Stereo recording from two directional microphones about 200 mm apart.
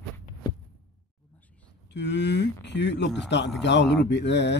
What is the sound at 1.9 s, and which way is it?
Speech, 60° left (ahead or behind).